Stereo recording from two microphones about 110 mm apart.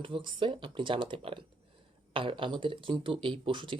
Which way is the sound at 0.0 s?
45° right (ahead or behind).